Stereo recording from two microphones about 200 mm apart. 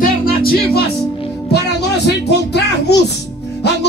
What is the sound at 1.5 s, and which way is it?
Speech, 55° left (ahead or behind).